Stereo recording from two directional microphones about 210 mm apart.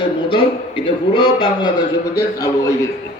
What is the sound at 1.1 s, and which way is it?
Speech, 25° left (ahead or behind).